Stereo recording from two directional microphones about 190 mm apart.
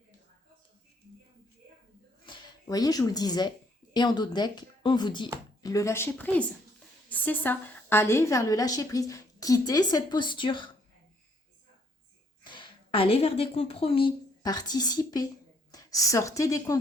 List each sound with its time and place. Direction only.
2.2 s a woman's voice: 25° left (ahead or behind)
12.4 s a woman's voice: 25° left (ahead or behind)